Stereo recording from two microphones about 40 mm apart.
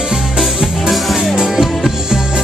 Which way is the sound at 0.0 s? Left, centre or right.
Centre.